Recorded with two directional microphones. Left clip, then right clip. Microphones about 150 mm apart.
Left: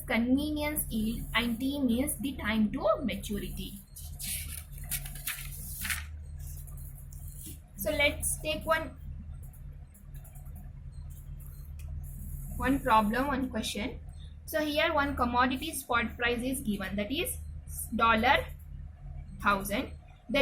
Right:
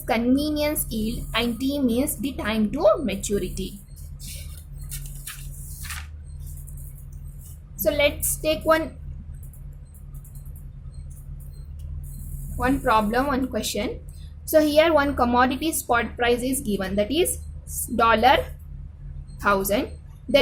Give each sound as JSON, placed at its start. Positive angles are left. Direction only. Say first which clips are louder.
{"t": 0.1, "sound": "a woman's voice", "louder": "right 7 dB", "side_deg": -90}
{"t": 7.8, "sound": "a woman's voice", "louder": "right 7 dB", "side_deg": -90}
{"t": 12.5, "sound": "a woman's voice", "louder": "right 5 dB", "side_deg": -75}